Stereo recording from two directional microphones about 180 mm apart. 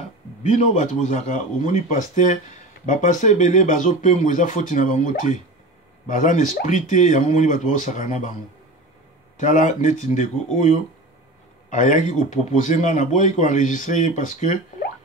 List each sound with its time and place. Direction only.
0.4 s a man's voice: 40° left (ahead or behind)
9.4 s a man's voice: 45° left (ahead or behind)
11.7 s a man's voice: 45° left (ahead or behind)